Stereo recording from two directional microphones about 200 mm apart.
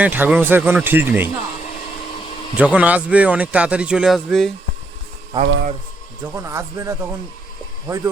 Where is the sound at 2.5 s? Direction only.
5° right (ahead or behind).